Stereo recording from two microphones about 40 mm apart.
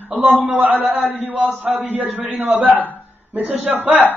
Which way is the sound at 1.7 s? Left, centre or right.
Right.